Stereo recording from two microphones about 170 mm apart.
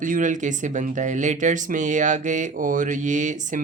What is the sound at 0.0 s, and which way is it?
Speech, 50° right (ahead or behind).